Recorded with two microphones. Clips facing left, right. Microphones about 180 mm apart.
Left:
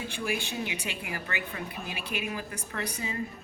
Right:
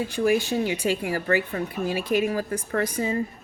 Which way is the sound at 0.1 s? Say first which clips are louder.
Right 13 dB; 40° right (ahead or behind).